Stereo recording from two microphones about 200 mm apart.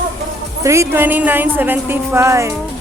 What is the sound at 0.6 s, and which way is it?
A woman's voice, 15° right (ahead or behind).